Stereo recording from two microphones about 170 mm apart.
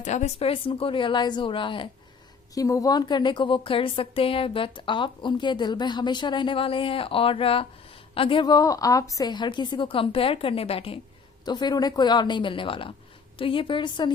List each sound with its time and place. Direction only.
0.0 s a woman's voice: 45° left (ahead or behind); by 14.1 s 25° left (ahead or behind)